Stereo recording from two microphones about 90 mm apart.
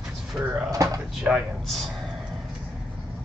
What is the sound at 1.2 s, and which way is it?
Speech, centre (ahead or behind).